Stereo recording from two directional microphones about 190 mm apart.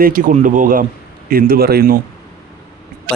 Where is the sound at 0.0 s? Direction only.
45° right (ahead or behind).